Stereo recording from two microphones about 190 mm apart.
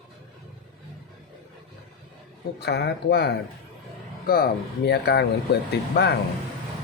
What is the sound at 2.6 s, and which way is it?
Speech, 60° left (ahead or behind).